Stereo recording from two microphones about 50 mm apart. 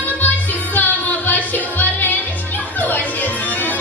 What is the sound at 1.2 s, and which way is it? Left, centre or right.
Music, left.